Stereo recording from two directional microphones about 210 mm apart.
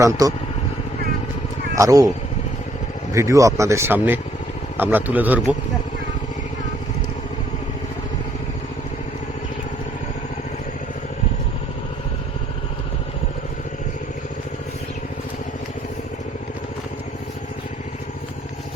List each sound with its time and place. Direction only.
0.0 s speech: 15° right (ahead or behind)
1.7 s speech: 15° right (ahead or behind)
3.1 s speech: 15° right (ahead or behind)